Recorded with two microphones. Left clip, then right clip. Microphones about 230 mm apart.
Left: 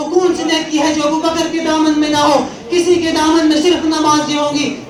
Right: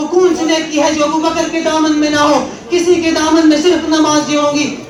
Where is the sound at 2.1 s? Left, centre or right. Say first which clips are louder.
Right 1 dB; left.